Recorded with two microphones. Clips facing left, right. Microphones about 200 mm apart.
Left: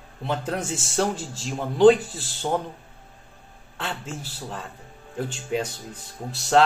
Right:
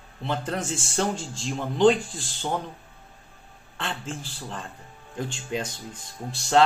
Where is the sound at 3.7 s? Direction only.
5° left (ahead or behind).